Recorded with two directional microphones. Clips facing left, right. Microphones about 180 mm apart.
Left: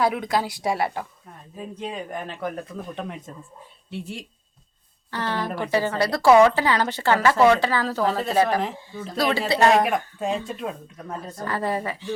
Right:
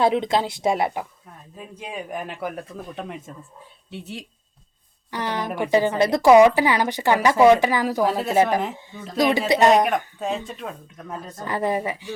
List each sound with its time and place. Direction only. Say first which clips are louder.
0.0 s speech: right 3 dB; 25° right (ahead or behind); by 4.3 s centre (ahead or behind)
5.1 s speech: right 1 dB; 15° right (ahead or behind)
10.2 s speech: left 1 dB; centre (ahead or behind)
11.4 s speech: right 3 dB; 15° right (ahead or behind)